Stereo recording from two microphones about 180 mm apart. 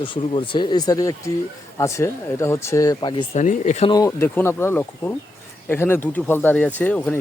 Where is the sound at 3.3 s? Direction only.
40° left (ahead or behind).